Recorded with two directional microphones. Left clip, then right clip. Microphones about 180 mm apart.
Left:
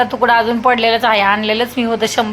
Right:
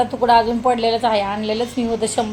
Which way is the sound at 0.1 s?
25° left (ahead or behind).